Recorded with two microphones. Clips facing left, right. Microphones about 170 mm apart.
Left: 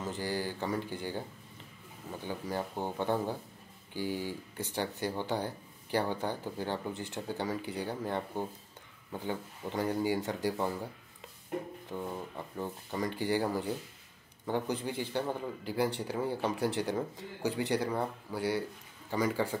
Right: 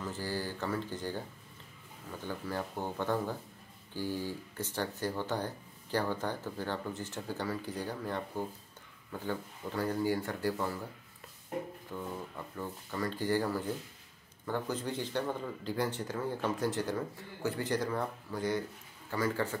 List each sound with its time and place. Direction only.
0.0 s speech: 15° left (ahead or behind)
2.2 s speech: 15° left (ahead or behind)
11.9 s speech: 20° left (ahead or behind)